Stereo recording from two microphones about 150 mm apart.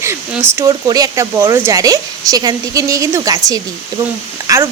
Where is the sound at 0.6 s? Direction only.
25° right (ahead or behind).